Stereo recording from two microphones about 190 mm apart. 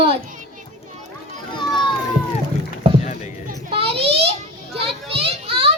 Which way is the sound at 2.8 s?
30° right (ahead or behind).